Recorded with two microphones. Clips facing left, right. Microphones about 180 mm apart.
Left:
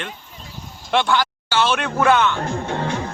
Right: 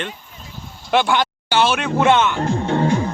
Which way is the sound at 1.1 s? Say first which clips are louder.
Right 2 dB; 15° right (ahead or behind).